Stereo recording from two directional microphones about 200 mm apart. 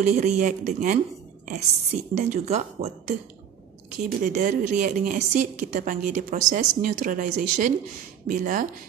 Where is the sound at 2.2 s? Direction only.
35° right (ahead or behind).